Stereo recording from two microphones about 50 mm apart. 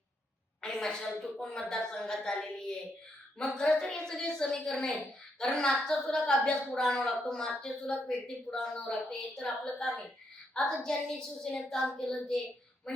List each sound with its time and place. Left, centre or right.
0.6 s a sound: centre
1.0 s a woman's voice: centre
8.6 s a woman's voice: centre